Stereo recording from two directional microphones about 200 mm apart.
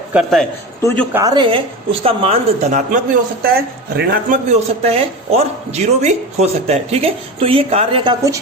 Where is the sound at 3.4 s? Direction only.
50° right (ahead or behind).